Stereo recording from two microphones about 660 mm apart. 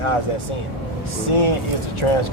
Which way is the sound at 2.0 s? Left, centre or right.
Left.